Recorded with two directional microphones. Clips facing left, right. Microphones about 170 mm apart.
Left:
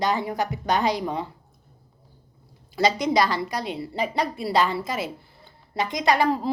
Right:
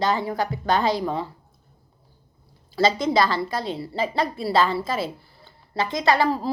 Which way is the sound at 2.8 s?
15° left (ahead or behind).